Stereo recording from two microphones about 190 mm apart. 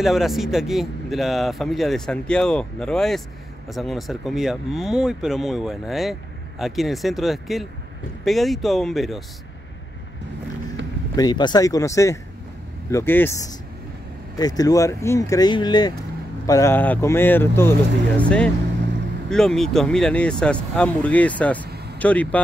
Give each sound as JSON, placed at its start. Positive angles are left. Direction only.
{"t": 0.0, "sound": "speech", "side_deg": 0}
{"t": 11.1, "sound": "speech", "side_deg": 20}
{"t": 19.2, "sound": "speech", "side_deg": 0}